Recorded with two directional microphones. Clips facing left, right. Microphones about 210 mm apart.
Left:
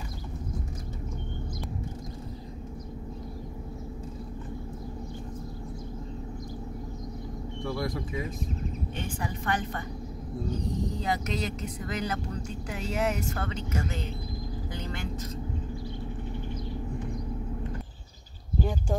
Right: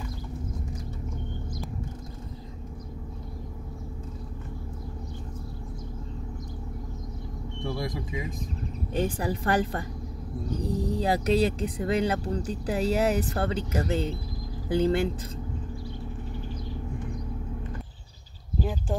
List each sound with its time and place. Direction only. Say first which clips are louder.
7.6 s speech: even; 20° right (ahead or behind)
8.9 s speech: right 7 dB; 35° right (ahead or behind)
18.6 s speech: even; centre (ahead or behind)